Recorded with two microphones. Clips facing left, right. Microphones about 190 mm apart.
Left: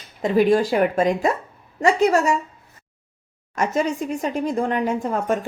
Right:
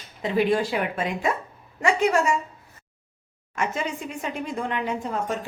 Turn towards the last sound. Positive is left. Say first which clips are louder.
# left 5 dB
turn(degrees=50)  # may be behind; listen again after turning